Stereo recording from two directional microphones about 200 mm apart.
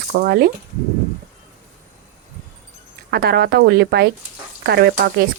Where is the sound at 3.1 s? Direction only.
50° right (ahead or behind).